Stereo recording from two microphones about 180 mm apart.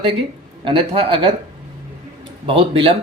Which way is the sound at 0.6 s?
30° right (ahead or behind).